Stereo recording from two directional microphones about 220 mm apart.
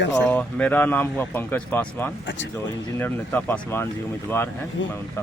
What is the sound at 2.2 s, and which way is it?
Speech, 55° left (ahead or behind).